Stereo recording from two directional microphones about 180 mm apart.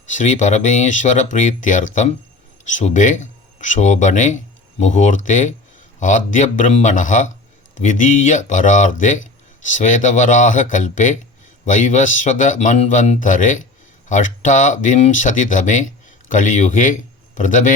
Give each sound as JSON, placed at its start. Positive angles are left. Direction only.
{"t": 0.1, "sound": "a man's voice", "side_deg": 45}